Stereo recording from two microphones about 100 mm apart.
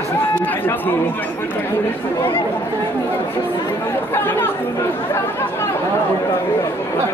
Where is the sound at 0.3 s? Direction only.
20° left (ahead or behind).